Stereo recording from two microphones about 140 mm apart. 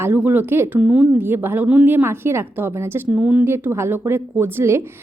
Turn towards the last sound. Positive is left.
turn(degrees=-15)  # may be behind; listen again after turning